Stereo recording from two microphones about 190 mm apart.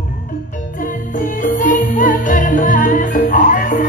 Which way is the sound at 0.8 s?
45° left (ahead or behind).